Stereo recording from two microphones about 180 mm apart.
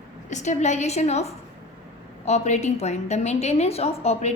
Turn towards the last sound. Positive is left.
turn(degrees=35)  # may be behind; listen again after turning